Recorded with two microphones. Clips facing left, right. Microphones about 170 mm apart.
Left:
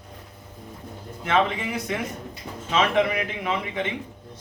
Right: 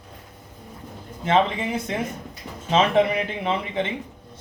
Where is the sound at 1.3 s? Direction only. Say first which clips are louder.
Right 2 dB; 25° right (ahead or behind).